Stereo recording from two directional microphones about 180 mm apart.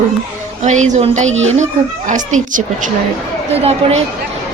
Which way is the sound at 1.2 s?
90° right.